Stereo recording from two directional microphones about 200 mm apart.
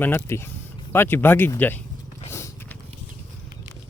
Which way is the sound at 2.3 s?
10° left (ahead or behind).